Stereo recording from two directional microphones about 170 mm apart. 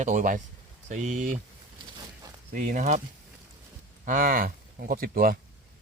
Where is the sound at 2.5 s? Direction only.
50° right (ahead or behind).